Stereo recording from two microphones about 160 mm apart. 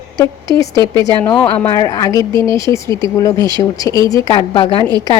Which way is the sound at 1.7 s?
20° left (ahead or behind).